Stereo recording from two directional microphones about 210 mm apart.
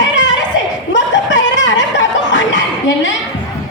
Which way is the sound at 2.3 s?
60° left (ahead or behind).